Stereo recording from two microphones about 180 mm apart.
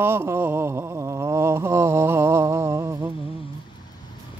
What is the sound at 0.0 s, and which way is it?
Mantra, 10° right (ahead or behind).